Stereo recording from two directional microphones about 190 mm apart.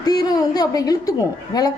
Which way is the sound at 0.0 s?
20° left (ahead or behind).